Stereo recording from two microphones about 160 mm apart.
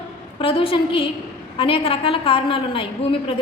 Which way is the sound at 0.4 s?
35° left (ahead or behind).